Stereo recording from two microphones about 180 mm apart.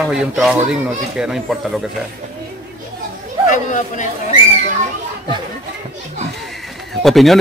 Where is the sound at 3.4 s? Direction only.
45° left (ahead or behind).